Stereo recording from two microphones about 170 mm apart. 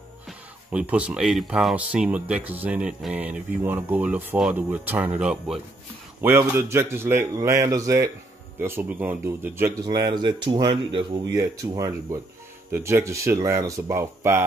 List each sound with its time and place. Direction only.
0.3 s speech: 10° right (ahead or behind)
9.8 s speech: 25° right (ahead or behind)